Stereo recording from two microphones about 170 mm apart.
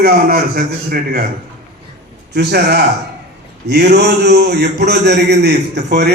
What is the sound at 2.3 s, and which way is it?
A man's voice, 70° right (ahead or behind).